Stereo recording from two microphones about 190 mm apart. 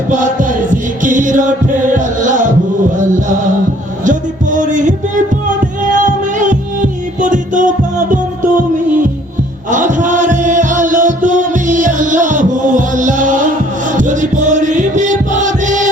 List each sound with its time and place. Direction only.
0.1 s music: 45° right (ahead or behind)
4.0 s music: 40° right (ahead or behind)